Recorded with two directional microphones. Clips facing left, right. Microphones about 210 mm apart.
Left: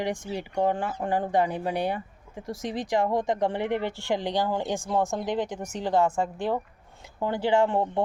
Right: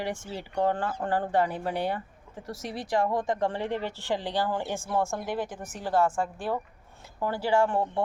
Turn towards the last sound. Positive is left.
turn(degrees=20)  # may be behind; listen again after turning